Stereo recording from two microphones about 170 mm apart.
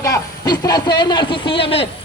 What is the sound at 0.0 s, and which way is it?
A man's voice, 20° left (ahead or behind).